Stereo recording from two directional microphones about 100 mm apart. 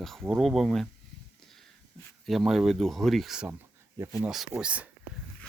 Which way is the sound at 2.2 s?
Centre (ahead or behind).